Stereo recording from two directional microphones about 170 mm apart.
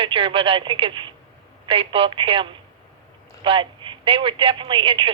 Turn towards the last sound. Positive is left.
turn(degrees=-30)  # may be behind; listen again after turning